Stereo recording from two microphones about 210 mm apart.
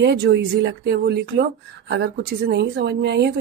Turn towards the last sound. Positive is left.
turn(degrees=-55)  # may be behind; listen again after turning